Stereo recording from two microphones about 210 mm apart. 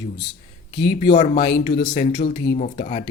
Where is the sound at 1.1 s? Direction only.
30° left (ahead or behind).